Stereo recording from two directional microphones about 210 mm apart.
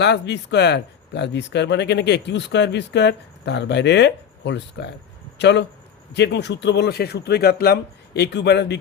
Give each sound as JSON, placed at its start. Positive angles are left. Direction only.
{"t": 0.0, "sound": "speech", "side_deg": 55}